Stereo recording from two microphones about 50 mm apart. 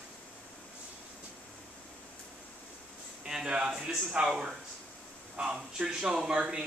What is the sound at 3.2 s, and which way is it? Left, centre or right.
Speech, centre.